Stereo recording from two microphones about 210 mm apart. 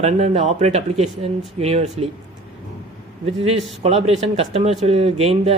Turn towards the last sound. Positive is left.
turn(degrees=-30)  # may be behind; listen again after turning